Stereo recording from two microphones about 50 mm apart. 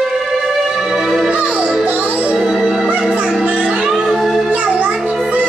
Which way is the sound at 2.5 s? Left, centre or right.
Centre.